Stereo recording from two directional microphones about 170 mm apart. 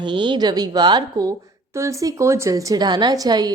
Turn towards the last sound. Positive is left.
turn(degrees=-25)  # may be behind; listen again after turning